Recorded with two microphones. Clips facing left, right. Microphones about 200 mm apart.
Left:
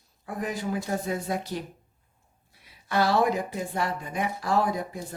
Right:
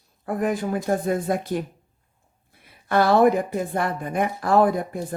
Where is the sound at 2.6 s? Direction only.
55° right (ahead or behind).